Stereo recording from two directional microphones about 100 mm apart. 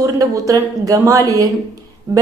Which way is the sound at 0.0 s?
35° right (ahead or behind).